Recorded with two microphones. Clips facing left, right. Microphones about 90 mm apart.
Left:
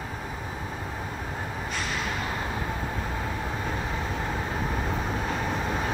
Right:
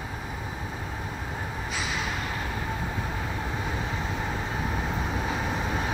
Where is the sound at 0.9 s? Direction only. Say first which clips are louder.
Left 1 dB; centre (ahead or behind).